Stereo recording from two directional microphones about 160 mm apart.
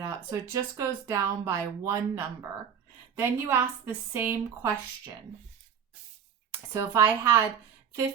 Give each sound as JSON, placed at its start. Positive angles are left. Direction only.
{"t": 0.0, "sound": "speech", "side_deg": -20}
{"t": 6.7, "sound": "speech", "side_deg": -15}